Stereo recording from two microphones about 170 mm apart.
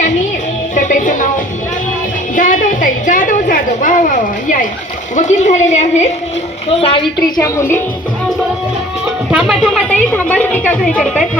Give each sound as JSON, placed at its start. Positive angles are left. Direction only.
{"t": 0.8, "sound": "music", "side_deg": 50}
{"t": 2.3, "sound": "a woman's voice", "side_deg": 50}
{"t": 6.7, "sound": "a woman's voice", "side_deg": 30}
{"t": 9.3, "sound": "a woman's voice", "side_deg": 0}